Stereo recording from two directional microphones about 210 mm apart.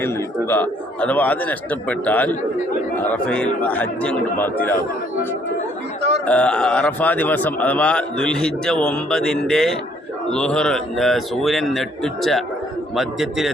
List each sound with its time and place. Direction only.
0.0 s a man's voice: 10° left (ahead or behind)
6.2 s a man's voice: 5° left (ahead or behind)